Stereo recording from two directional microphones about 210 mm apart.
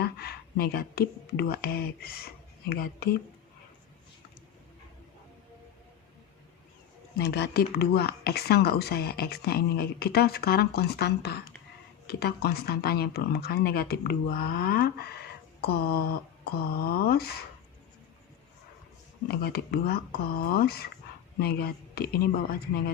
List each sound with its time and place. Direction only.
0.0 s speech: 45° left (ahead or behind)
7.2 s speech: 50° left (ahead or behind)
19.3 s speech: 50° left (ahead or behind)